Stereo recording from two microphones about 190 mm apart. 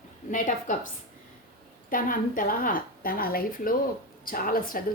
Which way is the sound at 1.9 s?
45° left (ahead or behind).